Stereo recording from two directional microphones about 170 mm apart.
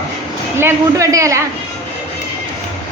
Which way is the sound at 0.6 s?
15° right (ahead or behind).